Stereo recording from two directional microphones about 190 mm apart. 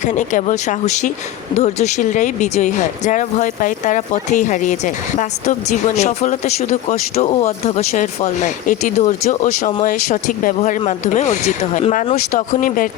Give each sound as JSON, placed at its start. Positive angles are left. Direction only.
{"t": 0.0, "sound": "speech", "side_deg": 40}